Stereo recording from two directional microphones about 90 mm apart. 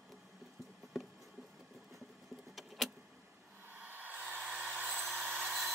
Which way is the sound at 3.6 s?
20° right (ahead or behind).